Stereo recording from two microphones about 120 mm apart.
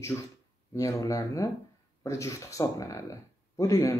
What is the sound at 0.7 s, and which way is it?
Speech, 25° left (ahead or behind).